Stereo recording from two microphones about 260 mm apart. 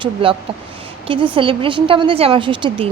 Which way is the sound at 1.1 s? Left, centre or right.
Centre.